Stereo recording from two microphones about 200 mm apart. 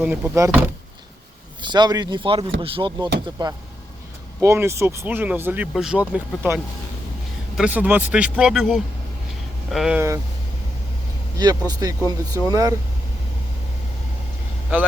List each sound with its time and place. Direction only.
0.0 s speech: 5° right (ahead or behind)
1.6 s speech: 20° right (ahead or behind)
11.3 s speech: 20° right (ahead or behind)